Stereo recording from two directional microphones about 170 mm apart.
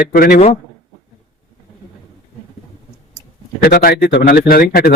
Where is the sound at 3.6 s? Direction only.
65° left (ahead or behind).